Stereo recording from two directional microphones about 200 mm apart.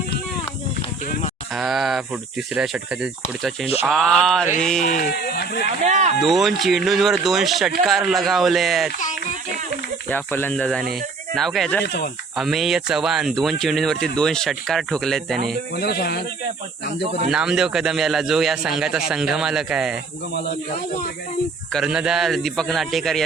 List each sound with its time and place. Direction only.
1.5 s speech: centre (ahead or behind)
4.8 s speech: 40° left (ahead or behind)
5.8 s speech: 35° right (ahead or behind)
6.2 s speech: centre (ahead or behind)
10.1 s speech: 10° left (ahead or behind)
15.7 s speech: 55° left (ahead or behind)
17.3 s speech: 5° right (ahead or behind)
21.7 s speech: centre (ahead or behind)